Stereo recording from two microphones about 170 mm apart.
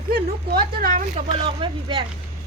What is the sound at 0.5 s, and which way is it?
Speech, 55° right (ahead or behind).